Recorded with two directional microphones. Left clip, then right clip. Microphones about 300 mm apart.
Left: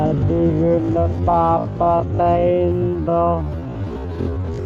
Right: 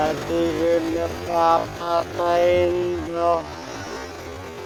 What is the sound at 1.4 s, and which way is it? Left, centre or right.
Music, right.